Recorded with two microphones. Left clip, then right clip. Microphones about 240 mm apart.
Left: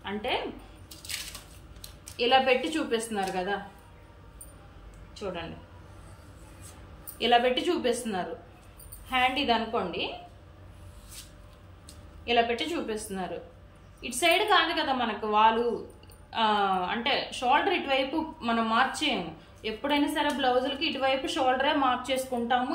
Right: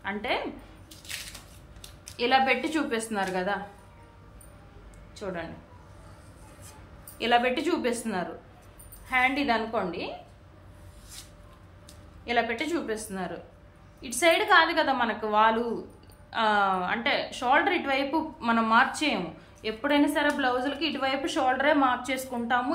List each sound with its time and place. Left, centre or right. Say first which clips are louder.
0.0 s speech: right 1 dB; centre
1.1 s coin: left 1 dB; centre
1.8 s a woman's voice: even; centre
7.2 s a woman's voice: left 1 dB; centre
12.3 s a woman's voice: left 1 dB; centre